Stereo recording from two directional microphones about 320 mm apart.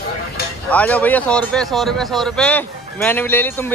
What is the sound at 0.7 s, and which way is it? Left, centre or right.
Speech, centre.